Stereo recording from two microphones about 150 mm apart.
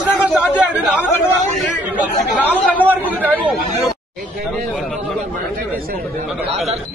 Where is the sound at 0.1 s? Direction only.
10° right (ahead or behind).